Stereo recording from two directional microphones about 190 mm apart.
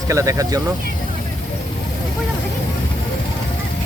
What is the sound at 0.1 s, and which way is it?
Speech, 15° right (ahead or behind).